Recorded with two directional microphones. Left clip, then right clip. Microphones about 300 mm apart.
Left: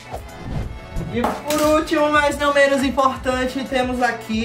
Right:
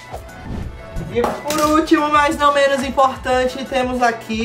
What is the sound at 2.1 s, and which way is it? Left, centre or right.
Speech, centre.